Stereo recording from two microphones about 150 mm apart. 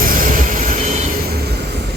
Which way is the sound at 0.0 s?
65° right (ahead or behind).